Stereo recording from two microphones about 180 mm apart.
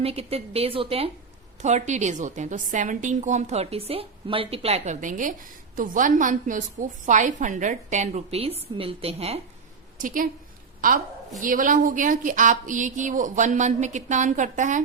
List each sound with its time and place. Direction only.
0.0 s a woman's voice: 35° right (ahead or behind)
10.8 s a woman's voice: 50° right (ahead or behind)